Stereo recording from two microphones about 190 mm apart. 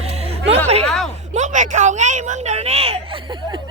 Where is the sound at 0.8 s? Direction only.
5° left (ahead or behind).